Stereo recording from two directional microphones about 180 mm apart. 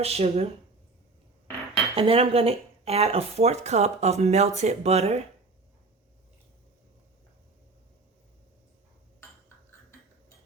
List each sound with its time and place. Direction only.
0.0 s speech: 35° right (ahead or behind)
2.0 s speech: 30° right (ahead or behind)